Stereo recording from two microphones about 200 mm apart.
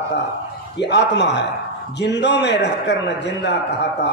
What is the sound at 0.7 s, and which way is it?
A man's voice, 60° left (ahead or behind).